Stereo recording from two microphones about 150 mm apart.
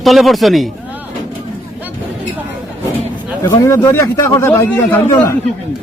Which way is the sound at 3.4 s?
25° left (ahead or behind).